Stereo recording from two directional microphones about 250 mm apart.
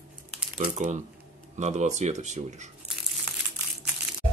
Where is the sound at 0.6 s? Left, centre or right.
Right.